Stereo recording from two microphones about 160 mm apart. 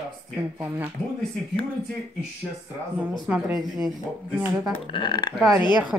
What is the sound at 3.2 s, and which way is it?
Speech, 5° right (ahead or behind).